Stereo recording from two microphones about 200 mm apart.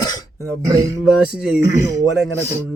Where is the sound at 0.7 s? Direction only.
15° right (ahead or behind).